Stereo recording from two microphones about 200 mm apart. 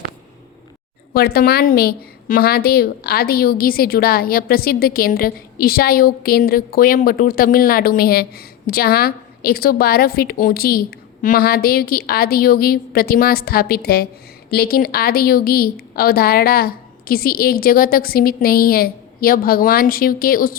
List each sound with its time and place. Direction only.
1.1 s a woman's voice: 50° left (ahead or behind)